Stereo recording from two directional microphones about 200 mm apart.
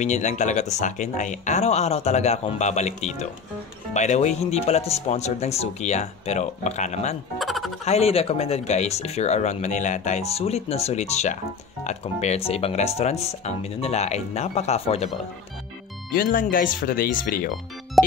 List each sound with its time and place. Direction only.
0.0 s speech: 35° left (ahead or behind)
7.3 s music: centre (ahead or behind)
7.8 s speech: 30° left (ahead or behind)
16.1 s speech: 45° left (ahead or behind)
18.0 s music: centre (ahead or behind)